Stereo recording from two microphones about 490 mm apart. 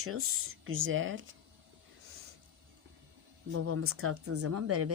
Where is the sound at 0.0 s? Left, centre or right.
Right.